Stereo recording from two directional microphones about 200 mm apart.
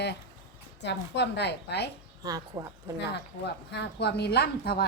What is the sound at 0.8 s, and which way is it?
Speech, 60° left (ahead or behind).